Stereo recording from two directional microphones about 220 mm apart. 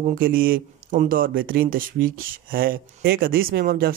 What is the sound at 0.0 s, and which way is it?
Speech, 40° right (ahead or behind).